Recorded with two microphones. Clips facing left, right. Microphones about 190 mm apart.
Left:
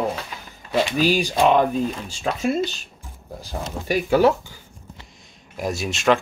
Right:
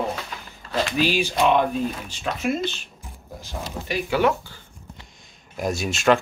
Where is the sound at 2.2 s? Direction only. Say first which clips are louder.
Left 2 dB; 40° left (ahead or behind).